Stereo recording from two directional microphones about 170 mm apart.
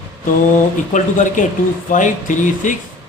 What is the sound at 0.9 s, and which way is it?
A man's voice, 50° left (ahead or behind).